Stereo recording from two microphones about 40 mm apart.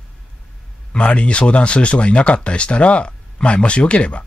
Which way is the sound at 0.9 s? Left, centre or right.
Left.